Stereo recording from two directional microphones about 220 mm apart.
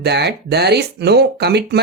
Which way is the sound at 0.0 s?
50° right (ahead or behind).